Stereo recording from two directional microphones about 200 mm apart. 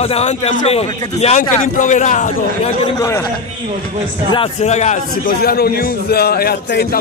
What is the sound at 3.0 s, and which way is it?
Speech, 15° left (ahead or behind).